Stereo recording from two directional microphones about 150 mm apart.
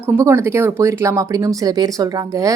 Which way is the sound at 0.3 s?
20° right (ahead or behind).